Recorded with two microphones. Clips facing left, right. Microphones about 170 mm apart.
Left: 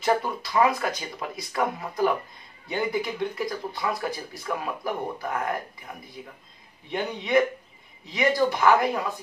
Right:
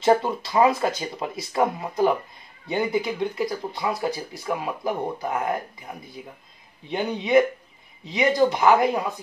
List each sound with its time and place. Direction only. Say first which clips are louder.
0.0 s speech: right 5 dB; 25° right (ahead or behind)
5.9 s speech: right 4 dB; 10° right (ahead or behind)
6.9 s speech: right 4 dB; 20° right (ahead or behind)